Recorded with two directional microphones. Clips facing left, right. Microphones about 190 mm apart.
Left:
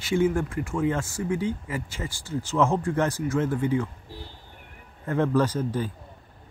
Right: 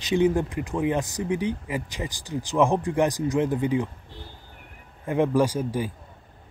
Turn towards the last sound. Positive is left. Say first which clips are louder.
# right 2 dB
turn(degrees=-10)  # may be behind; listen again after turning